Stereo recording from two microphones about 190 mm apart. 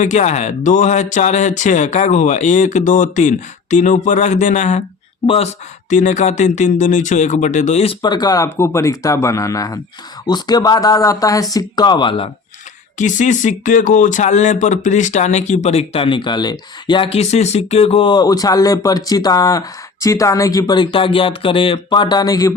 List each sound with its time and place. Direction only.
0.0 s speech: 40° left (ahead or behind)
5.2 s speech: 30° left (ahead or behind)
5.9 s speech: 40° left (ahead or behind)
8.0 s speech: 20° left (ahead or behind)
13.0 s speech: 40° left (ahead or behind); by 22.5 s 20° left (ahead or behind)